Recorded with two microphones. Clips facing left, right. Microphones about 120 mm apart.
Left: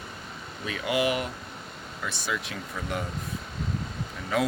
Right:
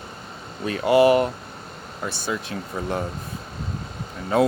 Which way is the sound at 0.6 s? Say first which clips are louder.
Right 10 dB; 45° right (ahead or behind).